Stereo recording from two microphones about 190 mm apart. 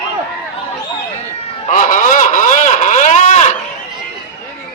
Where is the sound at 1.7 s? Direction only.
45° left (ahead or behind).